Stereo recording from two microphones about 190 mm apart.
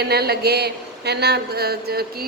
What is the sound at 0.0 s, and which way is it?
A man's voice, 55° right (ahead or behind).